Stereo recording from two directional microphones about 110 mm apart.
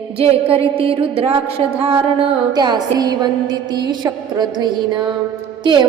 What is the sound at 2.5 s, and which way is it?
Music, 40° right (ahead or behind).